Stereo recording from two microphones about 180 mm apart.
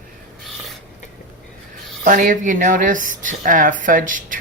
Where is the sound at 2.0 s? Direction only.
45° right (ahead or behind).